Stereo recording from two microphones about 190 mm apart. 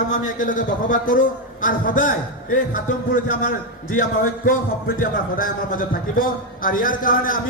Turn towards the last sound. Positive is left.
turn(degrees=45)  # may be behind; listen again after turning